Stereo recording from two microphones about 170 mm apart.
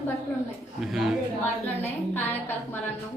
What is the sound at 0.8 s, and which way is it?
Speech, 5° right (ahead or behind).